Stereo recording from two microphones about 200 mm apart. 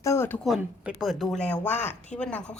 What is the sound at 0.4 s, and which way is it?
Speech, centre (ahead or behind).